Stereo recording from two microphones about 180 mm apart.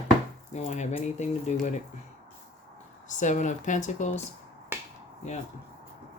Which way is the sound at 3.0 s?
45° left (ahead or behind).